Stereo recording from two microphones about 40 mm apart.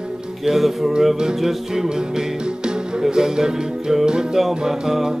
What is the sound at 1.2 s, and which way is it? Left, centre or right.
Music, centre.